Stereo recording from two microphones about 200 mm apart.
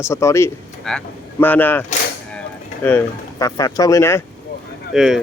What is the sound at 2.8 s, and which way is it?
Speech, 15° left (ahead or behind).